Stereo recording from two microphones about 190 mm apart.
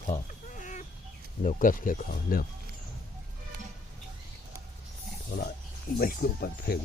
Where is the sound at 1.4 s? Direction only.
45° left (ahead or behind).